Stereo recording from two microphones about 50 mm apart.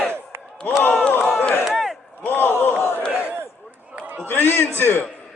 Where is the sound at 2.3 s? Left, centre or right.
Left.